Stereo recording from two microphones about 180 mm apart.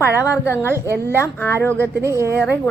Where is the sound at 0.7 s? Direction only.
15° right (ahead or behind).